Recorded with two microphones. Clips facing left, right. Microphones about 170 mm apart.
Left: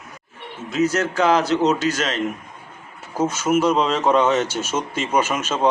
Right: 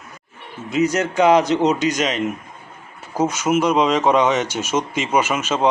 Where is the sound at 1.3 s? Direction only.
5° left (ahead or behind).